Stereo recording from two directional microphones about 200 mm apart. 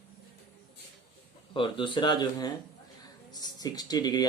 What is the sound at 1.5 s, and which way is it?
Speech, 25° left (ahead or behind).